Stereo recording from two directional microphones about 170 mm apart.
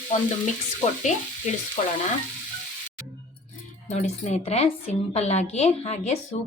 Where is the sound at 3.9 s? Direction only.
40° left (ahead or behind).